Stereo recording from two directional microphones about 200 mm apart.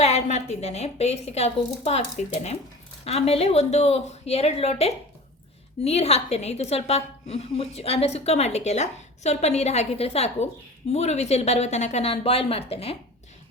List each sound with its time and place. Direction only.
0.0 s a woman's voice: 35° left (ahead or behind)